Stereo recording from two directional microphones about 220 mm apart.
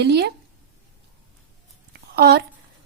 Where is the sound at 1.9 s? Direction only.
45° right (ahead or behind).